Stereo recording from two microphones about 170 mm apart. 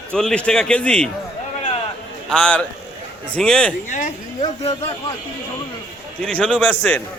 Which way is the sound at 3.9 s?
50° left (ahead or behind).